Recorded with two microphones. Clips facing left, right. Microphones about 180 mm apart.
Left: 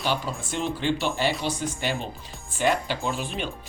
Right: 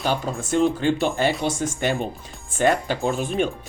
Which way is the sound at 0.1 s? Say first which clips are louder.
Right 7 dB; 45° right (ahead or behind).